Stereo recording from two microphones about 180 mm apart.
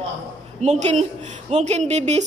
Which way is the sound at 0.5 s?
40° right (ahead or behind).